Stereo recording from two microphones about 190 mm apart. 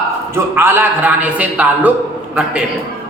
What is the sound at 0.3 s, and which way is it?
A man's voice, 10° right (ahead or behind).